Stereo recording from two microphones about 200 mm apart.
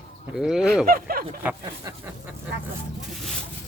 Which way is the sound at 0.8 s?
50° right (ahead or behind).